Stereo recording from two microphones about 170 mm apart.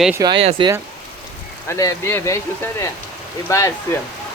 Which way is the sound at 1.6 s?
15° left (ahead or behind).